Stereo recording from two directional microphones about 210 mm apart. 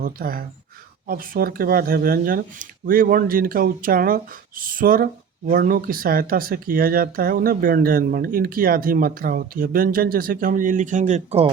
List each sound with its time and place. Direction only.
0.0 s speech: 45° right (ahead or behind)